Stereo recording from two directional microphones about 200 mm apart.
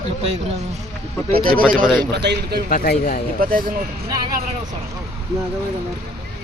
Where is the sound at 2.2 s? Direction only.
55° right (ahead or behind).